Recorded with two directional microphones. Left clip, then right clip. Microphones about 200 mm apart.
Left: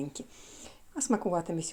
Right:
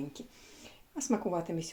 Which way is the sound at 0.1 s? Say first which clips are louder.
Left 3 dB; 35° left (ahead or behind).